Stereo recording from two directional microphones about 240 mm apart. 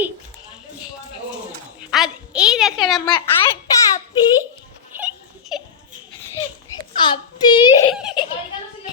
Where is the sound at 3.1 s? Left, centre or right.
Centre.